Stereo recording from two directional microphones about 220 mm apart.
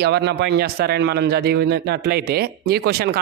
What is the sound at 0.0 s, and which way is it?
A man's voice, 50° right (ahead or behind).